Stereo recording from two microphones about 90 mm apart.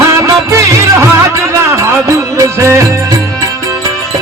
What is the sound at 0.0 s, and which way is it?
Music, 35° right (ahead or behind).